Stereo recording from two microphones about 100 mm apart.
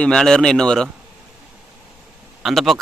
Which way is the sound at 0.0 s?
5° left (ahead or behind).